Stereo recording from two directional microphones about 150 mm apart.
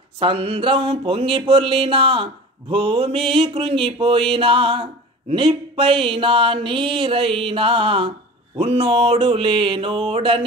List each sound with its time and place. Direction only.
0.2 s mantra: 35° right (ahead or behind)